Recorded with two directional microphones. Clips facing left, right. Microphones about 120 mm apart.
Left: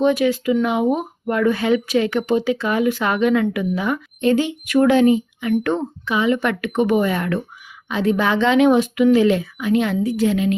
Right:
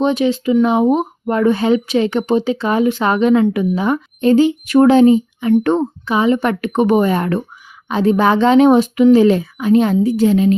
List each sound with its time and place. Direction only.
0.0 s speech: 25° right (ahead or behind)